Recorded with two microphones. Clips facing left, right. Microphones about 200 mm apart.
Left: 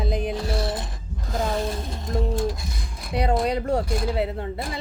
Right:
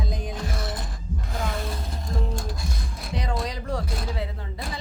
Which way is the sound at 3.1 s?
60° left (ahead or behind).